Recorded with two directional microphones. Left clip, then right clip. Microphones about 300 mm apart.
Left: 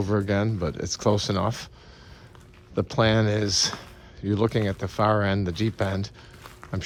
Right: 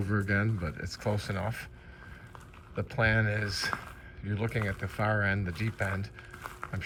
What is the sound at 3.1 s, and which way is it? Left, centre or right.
Speech, centre.